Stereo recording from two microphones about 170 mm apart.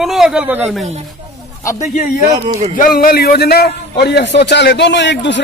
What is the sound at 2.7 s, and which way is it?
A man's voice, 55° left (ahead or behind).